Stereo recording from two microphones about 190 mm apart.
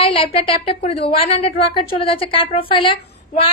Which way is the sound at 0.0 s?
30° left (ahead or behind).